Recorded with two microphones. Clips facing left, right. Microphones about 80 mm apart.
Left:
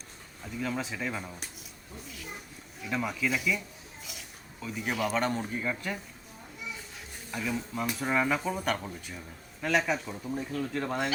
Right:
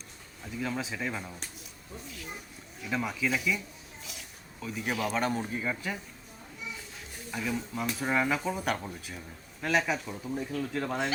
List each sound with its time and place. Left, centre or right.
0.4 s speech: centre
2.8 s speech: centre
4.6 s speech: centre
7.3 s speech: centre